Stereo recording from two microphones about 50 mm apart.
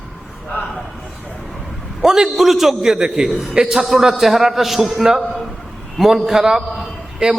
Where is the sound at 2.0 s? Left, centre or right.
Centre.